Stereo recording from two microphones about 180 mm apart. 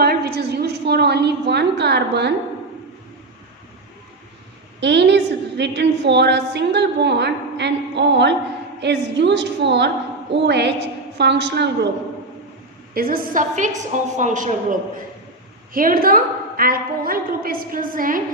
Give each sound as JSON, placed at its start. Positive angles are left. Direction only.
{"t": 0.0, "sound": "a sound", "side_deg": -60}
{"t": 4.8, "sound": "a woman's voice", "side_deg": -70}
{"t": 12.9, "sound": "a woman's voice", "side_deg": -55}
{"t": 15.7, "sound": "a woman's voice", "side_deg": -50}